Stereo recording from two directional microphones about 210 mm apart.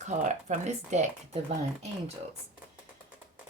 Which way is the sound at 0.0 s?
35° right (ahead or behind).